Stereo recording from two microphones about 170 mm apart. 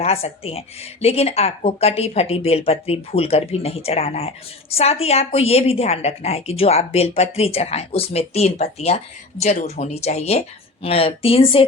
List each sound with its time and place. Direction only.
0.0 s a woman's voice: 35° left (ahead or behind)